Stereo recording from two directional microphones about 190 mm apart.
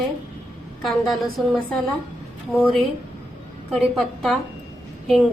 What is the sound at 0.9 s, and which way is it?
Speech, centre (ahead or behind).